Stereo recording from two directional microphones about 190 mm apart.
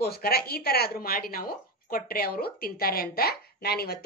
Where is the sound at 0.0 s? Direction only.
55° left (ahead or behind).